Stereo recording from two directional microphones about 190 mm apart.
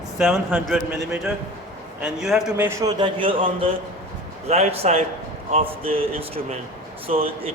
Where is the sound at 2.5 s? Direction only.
15° right (ahead or behind).